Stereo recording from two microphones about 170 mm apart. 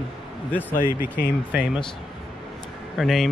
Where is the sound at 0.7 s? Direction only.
50° left (ahead or behind).